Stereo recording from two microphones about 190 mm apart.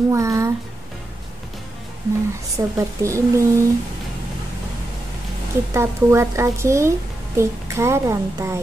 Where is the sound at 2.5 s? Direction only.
15° right (ahead or behind).